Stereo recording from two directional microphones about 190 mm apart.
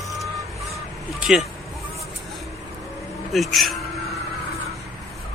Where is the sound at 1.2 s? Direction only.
Centre (ahead or behind).